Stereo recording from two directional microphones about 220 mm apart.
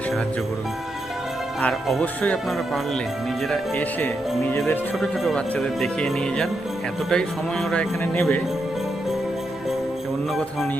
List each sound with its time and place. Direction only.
1.6 s jingle bell: 5° left (ahead or behind)
3.5 s speech: 5° left (ahead or behind)
4.9 s jingle bell: centre (ahead or behind)